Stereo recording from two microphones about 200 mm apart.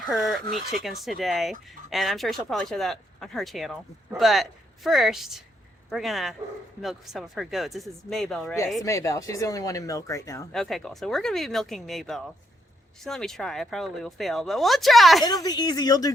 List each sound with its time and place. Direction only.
0.1 s speech: centre (ahead or behind)
8.8 s speech: 15° left (ahead or behind)
10.5 s speech: centre (ahead or behind)
15.2 s speech: 20° left (ahead or behind)